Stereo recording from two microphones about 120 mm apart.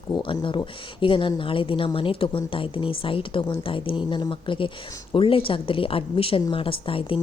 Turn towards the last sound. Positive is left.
turn(degrees=50)  # may be behind; listen again after turning